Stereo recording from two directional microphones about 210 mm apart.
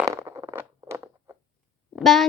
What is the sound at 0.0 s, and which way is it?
Zipper, 15° right (ahead or behind).